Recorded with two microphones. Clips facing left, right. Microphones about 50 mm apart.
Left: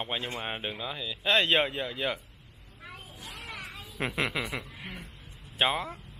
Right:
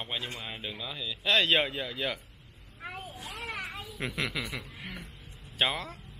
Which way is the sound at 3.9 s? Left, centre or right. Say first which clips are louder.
Left 4 dB; left.